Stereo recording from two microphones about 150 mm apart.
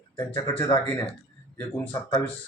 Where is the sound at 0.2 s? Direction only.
20° left (ahead or behind).